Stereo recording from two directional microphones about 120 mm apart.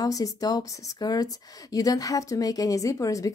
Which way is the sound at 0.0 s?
30° left (ahead or behind).